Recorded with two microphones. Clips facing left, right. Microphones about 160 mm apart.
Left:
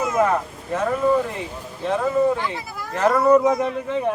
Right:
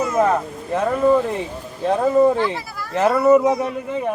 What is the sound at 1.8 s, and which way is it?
Speech, 40° right (ahead or behind).